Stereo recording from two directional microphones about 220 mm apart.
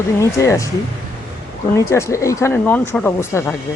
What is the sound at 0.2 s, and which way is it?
Speech, 15° left (ahead or behind).